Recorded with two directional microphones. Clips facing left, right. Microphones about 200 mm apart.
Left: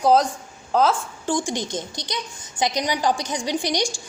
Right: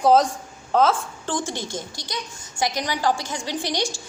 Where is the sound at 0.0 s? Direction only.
Centre (ahead or behind).